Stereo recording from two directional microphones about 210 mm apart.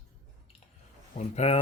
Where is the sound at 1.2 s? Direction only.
30° left (ahead or behind).